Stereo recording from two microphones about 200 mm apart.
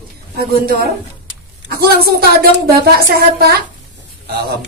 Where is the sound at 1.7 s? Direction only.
50° right (ahead or behind).